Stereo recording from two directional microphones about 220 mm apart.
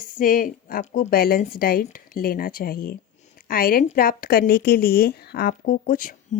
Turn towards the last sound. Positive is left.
turn(degrees=35)  # may be behind; listen again after turning